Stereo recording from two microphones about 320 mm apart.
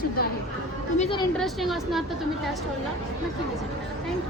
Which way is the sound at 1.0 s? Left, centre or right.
Centre.